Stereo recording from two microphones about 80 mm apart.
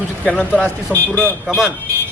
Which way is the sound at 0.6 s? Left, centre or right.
Centre.